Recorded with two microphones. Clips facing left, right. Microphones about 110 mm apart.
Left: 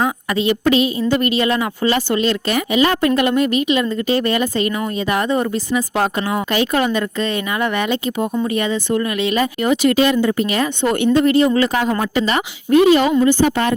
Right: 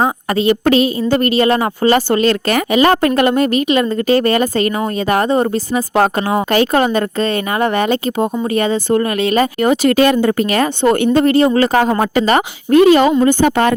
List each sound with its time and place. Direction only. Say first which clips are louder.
0.0 s a woman's voice: right 4 dB; 40° right (ahead or behind); by 13.7 s 60° right (ahead or behind)